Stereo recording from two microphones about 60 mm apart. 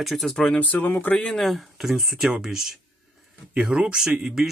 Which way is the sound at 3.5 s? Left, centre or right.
Centre.